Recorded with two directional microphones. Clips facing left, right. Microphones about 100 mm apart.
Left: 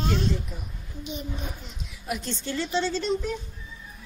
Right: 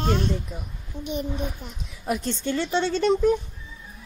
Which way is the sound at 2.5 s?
60° right (ahead or behind).